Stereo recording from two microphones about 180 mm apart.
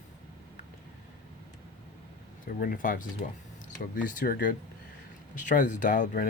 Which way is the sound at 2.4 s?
50° left (ahead or behind).